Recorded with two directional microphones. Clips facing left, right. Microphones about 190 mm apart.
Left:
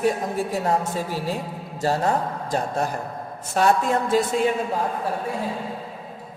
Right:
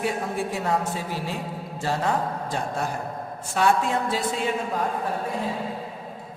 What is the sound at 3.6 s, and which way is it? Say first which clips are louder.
Speech: left 2 dB; 40° left (ahead or behind).